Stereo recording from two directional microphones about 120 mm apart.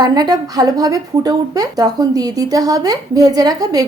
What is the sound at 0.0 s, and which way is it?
A woman's voice, 35° right (ahead or behind).